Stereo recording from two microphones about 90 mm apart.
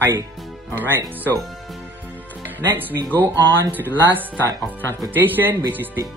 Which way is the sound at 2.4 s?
20° right (ahead or behind).